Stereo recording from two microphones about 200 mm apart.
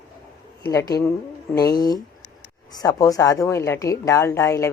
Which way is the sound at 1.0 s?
15° left (ahead or behind).